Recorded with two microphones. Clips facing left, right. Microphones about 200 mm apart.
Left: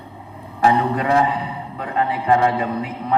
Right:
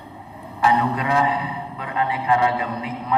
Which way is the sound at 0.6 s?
45° left (ahead or behind).